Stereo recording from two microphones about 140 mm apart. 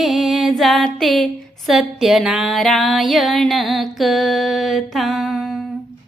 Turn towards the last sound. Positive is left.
turn(degrees=0)  # may be behind; listen again after turning